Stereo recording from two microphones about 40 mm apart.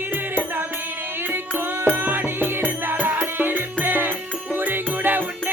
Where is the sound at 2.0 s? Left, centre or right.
Right.